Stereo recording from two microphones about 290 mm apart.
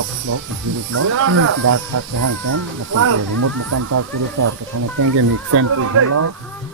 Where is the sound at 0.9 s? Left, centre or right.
Right.